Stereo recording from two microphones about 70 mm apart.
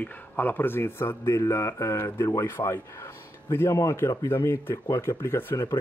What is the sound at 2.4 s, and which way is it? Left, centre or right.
Speech, left.